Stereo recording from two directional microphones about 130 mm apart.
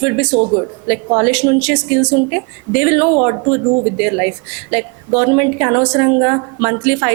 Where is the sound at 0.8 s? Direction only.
20° right (ahead or behind).